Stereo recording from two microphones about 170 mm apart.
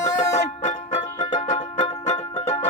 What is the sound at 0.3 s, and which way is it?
Music, 40° left (ahead or behind).